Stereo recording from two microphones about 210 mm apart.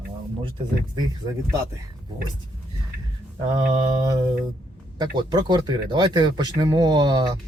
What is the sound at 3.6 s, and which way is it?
Mantra, 30° right (ahead or behind).